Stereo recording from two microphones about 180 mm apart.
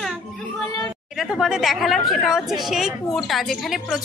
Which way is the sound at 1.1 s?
Centre (ahead or behind).